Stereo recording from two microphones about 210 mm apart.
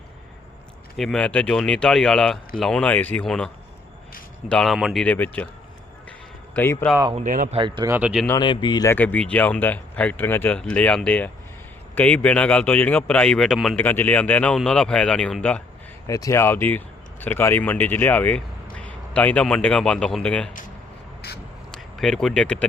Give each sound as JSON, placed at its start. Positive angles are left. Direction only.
{"t": 0.9, "sound": "speech", "side_deg": 0}
{"t": 6.6, "sound": "a man's voice", "side_deg": 10}
{"t": 7.2, "sound": "speech", "side_deg": -40}
{"t": 7.5, "sound": "speech", "side_deg": -25}
{"t": 7.9, "sound": "speech", "side_deg": -5}
{"t": 8.3, "sound": "a man's voice", "side_deg": 20}
{"t": 16.0, "sound": "speech", "side_deg": 15}
{"t": 21.2, "sound": "a sound", "side_deg": 50}
{"t": 21.8, "sound": "speech", "side_deg": 0}